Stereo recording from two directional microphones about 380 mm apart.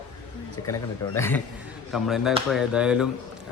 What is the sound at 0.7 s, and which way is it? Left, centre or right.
A man's voice, centre.